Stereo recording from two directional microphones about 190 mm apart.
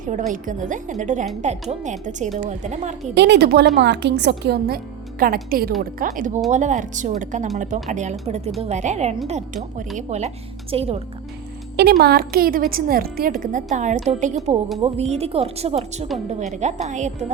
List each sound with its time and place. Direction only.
0.0 s a woman's voice: 40° right (ahead or behind)
3.2 s a woman's voice: 65° right (ahead or behind); by 10.9 s 30° right (ahead or behind)
11.8 s a woman's voice: 55° right (ahead or behind); by 17.3 s 40° right (ahead or behind)